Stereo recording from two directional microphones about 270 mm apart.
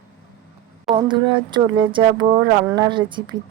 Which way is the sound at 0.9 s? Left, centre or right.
Centre.